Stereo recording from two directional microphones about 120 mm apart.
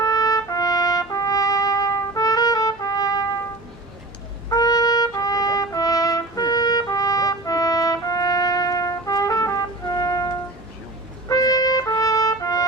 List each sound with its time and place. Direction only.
0.0 s trumpet: 30° left (ahead or behind)
4.4 s trumpet: 30° left (ahead or behind)